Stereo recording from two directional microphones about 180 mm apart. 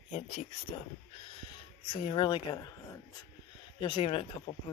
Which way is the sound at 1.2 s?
30° left (ahead or behind).